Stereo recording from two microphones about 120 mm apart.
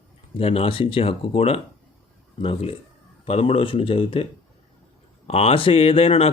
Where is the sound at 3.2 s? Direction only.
55° left (ahead or behind).